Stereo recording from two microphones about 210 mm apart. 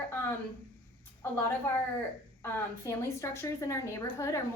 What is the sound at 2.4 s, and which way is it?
A woman's voice, 15° left (ahead or behind).